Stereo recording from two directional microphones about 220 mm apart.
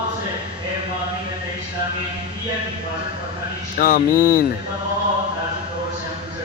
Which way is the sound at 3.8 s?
40° left (ahead or behind).